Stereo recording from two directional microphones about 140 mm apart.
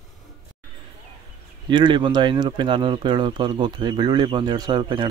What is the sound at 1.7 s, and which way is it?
Speech, 35° right (ahead or behind).